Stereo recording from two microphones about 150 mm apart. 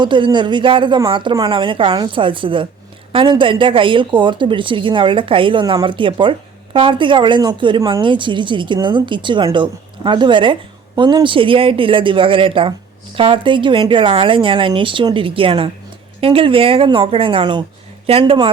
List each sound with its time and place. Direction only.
0.0 s speech: 30° right (ahead or behind)